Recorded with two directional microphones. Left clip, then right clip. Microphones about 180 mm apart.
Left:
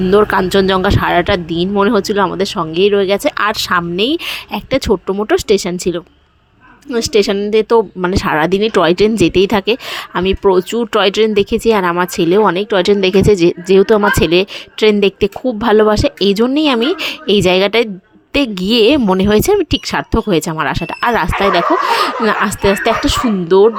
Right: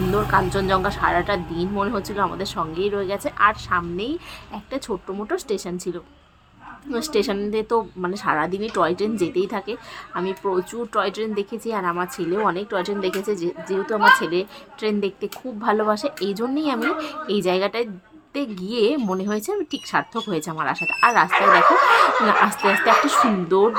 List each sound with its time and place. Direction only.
0.1 s speech: 50° left (ahead or behind)
22.3 s speech: 40° left (ahead or behind)